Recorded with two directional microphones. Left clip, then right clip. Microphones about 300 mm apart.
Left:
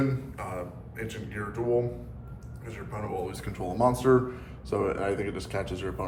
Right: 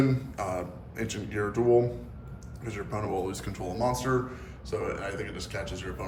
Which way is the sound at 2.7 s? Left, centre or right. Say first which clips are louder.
Right 3 dB; centre.